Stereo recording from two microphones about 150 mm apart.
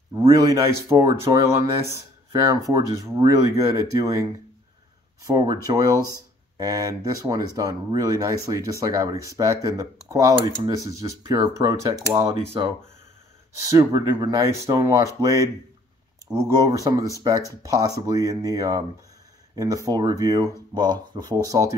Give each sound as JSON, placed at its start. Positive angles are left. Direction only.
{"t": 0.3, "sound": "speech", "side_deg": -25}
{"t": 13.7, "sound": "speech", "side_deg": -20}